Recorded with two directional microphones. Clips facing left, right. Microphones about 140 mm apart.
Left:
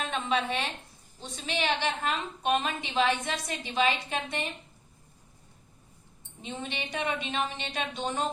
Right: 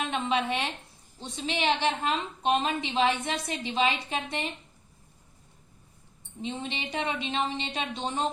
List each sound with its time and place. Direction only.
0.0 s a woman's voice: 20° right (ahead or behind)
6.4 s a woman's voice: 25° right (ahead or behind)